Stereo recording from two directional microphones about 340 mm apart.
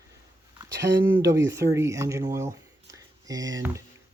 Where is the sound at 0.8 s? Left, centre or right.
Right.